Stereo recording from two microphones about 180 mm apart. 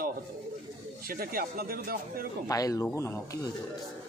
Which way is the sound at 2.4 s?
20° left (ahead or behind).